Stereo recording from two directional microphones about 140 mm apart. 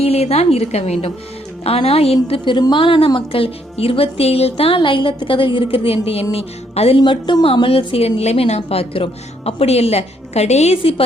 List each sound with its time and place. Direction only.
0.0 s a woman's voice: 45° left (ahead or behind)